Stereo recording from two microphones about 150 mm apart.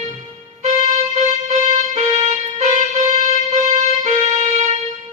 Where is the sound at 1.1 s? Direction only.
50° right (ahead or behind).